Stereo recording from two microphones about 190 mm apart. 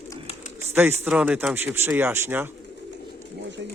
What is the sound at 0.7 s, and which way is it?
Speech, 10° right (ahead or behind).